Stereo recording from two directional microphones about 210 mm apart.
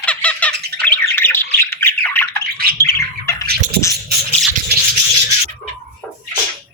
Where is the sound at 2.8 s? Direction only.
10° left (ahead or behind).